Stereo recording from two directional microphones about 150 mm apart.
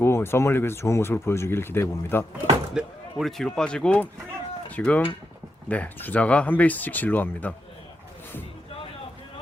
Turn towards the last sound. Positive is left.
turn(degrees=10)  # may be behind; listen again after turning